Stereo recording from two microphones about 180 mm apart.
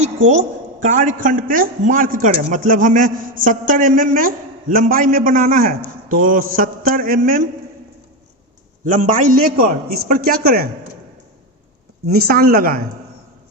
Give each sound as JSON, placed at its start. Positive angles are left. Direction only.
{"t": 0.0, "sound": "a woman's voice", "side_deg": -40}
{"t": 8.8, "sound": "a man's voice", "side_deg": -50}
{"t": 12.1, "sound": "a man's voice", "side_deg": -55}